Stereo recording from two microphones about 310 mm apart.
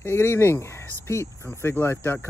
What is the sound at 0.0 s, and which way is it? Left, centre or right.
Speech, centre.